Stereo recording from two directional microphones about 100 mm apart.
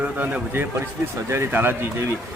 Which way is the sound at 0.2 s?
15° right (ahead or behind).